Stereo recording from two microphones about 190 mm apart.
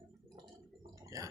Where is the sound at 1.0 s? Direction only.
15° right (ahead or behind).